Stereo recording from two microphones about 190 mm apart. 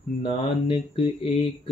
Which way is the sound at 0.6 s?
25° left (ahead or behind).